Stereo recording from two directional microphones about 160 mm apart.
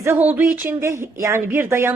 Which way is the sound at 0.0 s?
15° right (ahead or behind).